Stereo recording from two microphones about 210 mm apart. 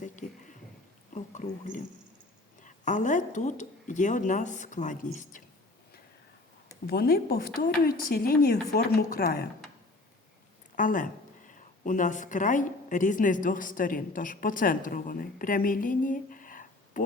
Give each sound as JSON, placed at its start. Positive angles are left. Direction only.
{"t": 0.0, "sound": "a sound", "side_deg": 35}
{"t": 1.1, "sound": "drip", "side_deg": 35}
{"t": 2.6, "sound": "speech", "side_deg": 35}
{"t": 6.8, "sound": "speech", "side_deg": 50}
{"t": 10.8, "sound": "speech", "side_deg": 40}